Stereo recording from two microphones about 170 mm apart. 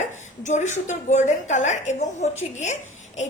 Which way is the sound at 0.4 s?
45° left (ahead or behind).